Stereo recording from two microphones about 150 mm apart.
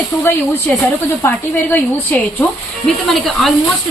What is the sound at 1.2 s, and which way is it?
Speech, 15° left (ahead or behind).